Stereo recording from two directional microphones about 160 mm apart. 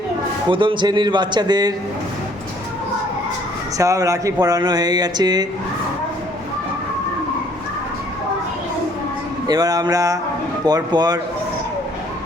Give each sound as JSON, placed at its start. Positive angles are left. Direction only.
{"t": 0.4, "sound": "speech", "side_deg": -30}
{"t": 3.8, "sound": "speech", "side_deg": -20}
{"t": 9.5, "sound": "speech", "side_deg": -25}